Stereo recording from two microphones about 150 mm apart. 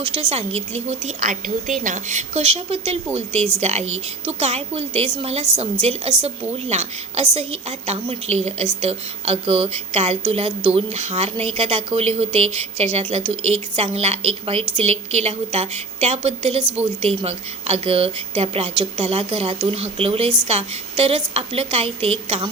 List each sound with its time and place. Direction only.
0.0 s a woman's voice: 40° right (ahead or behind)